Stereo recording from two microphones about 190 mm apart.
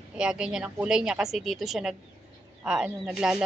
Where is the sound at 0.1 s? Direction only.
5° right (ahead or behind).